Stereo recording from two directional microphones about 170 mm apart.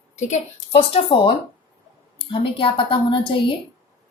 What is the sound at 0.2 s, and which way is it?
Speech, 40° left (ahead or behind).